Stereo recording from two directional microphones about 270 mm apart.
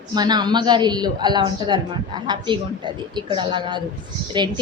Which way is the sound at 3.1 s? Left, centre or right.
Centre.